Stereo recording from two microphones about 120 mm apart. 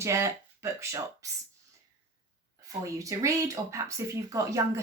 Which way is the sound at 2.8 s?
25° right (ahead or behind).